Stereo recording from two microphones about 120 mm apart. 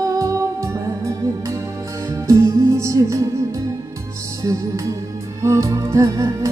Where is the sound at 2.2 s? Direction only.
25° right (ahead or behind).